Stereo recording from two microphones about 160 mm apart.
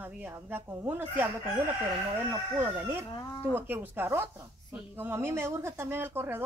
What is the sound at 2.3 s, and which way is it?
Speech, 15° right (ahead or behind).